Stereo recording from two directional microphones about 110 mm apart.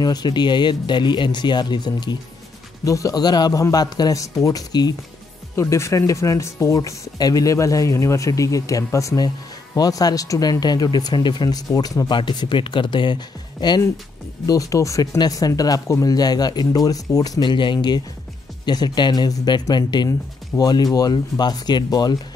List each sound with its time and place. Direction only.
0.0 s speech: 40° left (ahead or behind)
12.2 s speech: 45° left (ahead or behind)
17.4 s speech: 45° left (ahead or behind)